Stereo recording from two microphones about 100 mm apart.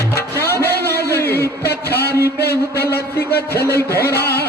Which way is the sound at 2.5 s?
25° left (ahead or behind).